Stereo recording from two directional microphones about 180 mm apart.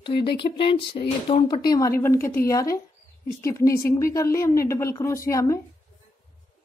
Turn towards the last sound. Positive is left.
turn(degrees=15)  # may be behind; listen again after turning